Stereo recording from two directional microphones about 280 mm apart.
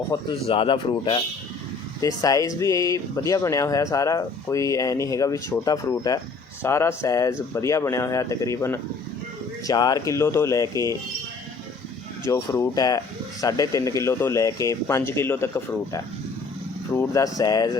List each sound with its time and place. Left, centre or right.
0.1 s speech: centre
12.3 s speech: centre